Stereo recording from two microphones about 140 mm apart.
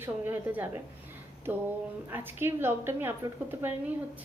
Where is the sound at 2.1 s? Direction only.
15° right (ahead or behind).